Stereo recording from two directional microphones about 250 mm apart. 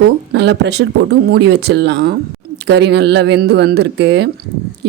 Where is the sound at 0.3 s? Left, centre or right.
Right.